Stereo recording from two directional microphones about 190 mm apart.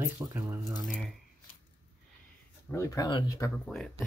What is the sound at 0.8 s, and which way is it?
Speech, centre (ahead or behind).